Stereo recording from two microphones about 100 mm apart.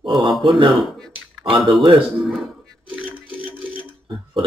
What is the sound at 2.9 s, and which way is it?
Music, 10° left (ahead or behind).